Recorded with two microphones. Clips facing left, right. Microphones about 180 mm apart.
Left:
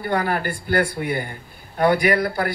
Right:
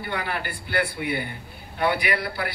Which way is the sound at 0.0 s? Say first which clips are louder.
Left 7 dB; 45° left (ahead or behind).